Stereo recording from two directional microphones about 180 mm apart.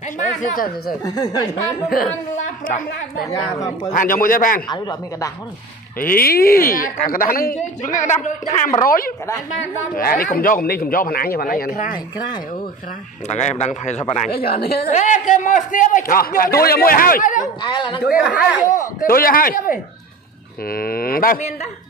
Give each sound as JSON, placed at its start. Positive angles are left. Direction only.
{"t": 0.2, "sound": "speech", "side_deg": 40}
{"t": 1.0, "sound": "speech", "side_deg": 20}
{"t": 2.3, "sound": "a woman's voice", "side_deg": 45}
{"t": 4.6, "sound": "speech", "side_deg": 25}
{"t": 5.9, "sound": "a man's voice", "side_deg": 55}
{"t": 8.0, "sound": "a man's voice", "side_deg": 40}
{"t": 8.8, "sound": "a man's voice", "side_deg": 50}
{"t": 13.3, "sound": "a man's voice", "side_deg": 40}
{"t": 14.3, "sound": "speech", "side_deg": 60}
{"t": 14.9, "sound": "a man's voice", "side_deg": 40}
{"t": 17.6, "sound": "speech", "side_deg": 25}
{"t": 18.2, "sound": "speech", "side_deg": -10}
{"t": 18.7, "sound": "a man's voice", "side_deg": 55}